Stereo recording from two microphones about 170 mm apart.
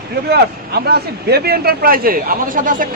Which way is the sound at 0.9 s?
70° right (ahead or behind).